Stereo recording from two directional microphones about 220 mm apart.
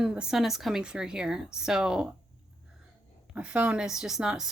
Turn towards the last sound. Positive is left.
turn(degrees=-5)  # may be behind; listen again after turning